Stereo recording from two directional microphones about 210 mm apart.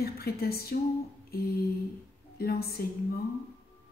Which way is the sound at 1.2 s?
45° left (ahead or behind).